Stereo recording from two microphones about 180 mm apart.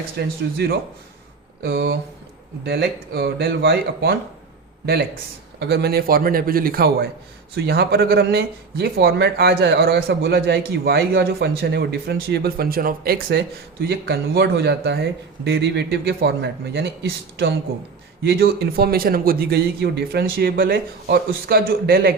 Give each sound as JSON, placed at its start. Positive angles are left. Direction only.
{"t": 0.2, "sound": "speech", "side_deg": -65}
{"t": 1.6, "sound": "speech", "side_deg": -60}
{"t": 5.5, "sound": "speech", "side_deg": -60}